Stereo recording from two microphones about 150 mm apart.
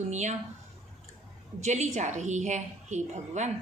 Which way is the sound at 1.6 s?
50° right (ahead or behind).